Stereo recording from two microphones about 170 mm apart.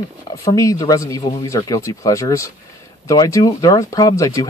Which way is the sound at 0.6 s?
20° left (ahead or behind).